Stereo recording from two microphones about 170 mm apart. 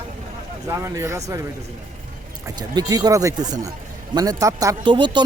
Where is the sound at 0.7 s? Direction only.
15° right (ahead or behind).